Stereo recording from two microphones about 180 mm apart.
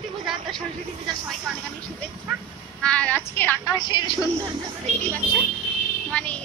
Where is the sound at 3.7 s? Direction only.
25° left (ahead or behind).